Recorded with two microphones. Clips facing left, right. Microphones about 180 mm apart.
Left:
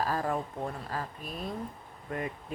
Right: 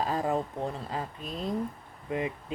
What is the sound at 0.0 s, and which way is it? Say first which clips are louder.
A woman's voice: right 2 dB; 20° right (ahead or behind).